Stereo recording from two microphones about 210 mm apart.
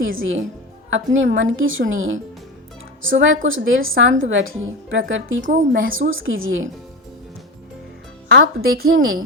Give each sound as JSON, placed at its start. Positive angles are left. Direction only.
{"t": 0.2, "sound": "a woman's voice", "side_deg": -65}
{"t": 5.5, "sound": "a woman's voice", "side_deg": -40}
{"t": 5.9, "sound": "a woman's voice", "side_deg": -70}
{"t": 8.3, "sound": "a woman's voice", "side_deg": -70}